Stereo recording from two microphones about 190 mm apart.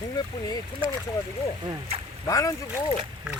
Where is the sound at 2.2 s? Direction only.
20° left (ahead or behind).